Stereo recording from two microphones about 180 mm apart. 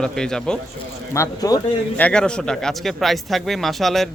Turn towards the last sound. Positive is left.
turn(degrees=0)  # may be behind; listen again after turning